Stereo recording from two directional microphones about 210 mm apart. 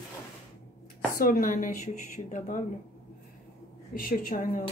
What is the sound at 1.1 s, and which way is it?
A woman's voice, 45° left (ahead or behind).